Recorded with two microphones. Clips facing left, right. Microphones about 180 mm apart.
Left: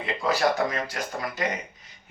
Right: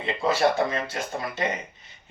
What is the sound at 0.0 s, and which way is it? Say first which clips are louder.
Speech: right 2 dB; 25° right (ahead or behind).